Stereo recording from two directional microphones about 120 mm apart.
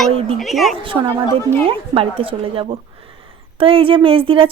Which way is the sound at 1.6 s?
50° right (ahead or behind).